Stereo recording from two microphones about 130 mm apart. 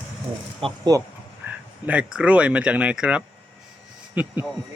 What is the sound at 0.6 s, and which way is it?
Speech, 45° right (ahead or behind).